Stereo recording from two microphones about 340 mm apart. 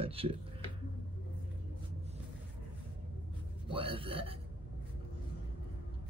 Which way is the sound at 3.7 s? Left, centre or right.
Centre.